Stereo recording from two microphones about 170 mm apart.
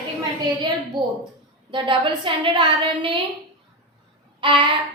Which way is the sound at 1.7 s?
30° right (ahead or behind).